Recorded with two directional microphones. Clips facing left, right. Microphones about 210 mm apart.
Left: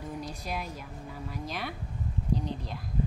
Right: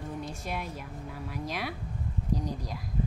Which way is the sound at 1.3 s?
10° right (ahead or behind).